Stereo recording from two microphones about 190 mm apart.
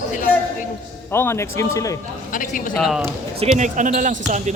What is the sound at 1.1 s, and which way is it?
Speech, 15° left (ahead or behind).